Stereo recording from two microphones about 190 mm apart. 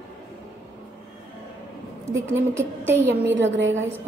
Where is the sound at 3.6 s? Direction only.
80° right.